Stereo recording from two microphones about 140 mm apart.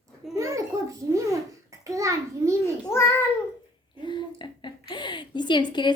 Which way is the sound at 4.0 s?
35° left (ahead or behind).